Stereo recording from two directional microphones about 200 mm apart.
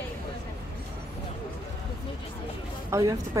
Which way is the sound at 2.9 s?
15° right (ahead or behind).